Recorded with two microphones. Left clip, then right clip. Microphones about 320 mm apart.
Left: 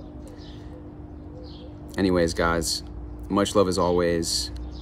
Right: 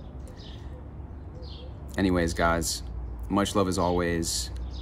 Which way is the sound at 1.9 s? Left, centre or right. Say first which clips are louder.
Left 4 dB; centre.